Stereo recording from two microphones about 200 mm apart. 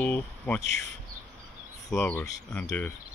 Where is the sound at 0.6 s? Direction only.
60° left (ahead or behind).